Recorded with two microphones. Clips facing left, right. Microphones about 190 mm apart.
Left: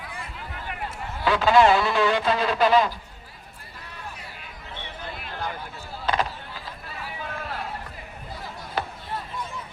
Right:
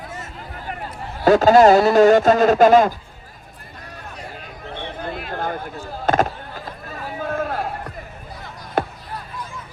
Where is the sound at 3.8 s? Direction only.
45° right (ahead or behind).